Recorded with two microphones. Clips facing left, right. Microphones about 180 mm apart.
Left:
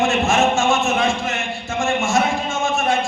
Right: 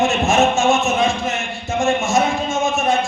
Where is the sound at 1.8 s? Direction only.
20° right (ahead or behind).